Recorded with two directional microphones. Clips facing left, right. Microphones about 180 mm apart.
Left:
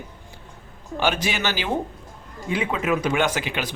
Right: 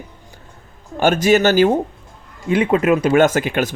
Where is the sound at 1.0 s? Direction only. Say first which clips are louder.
Right 10 dB; 45° right (ahead or behind).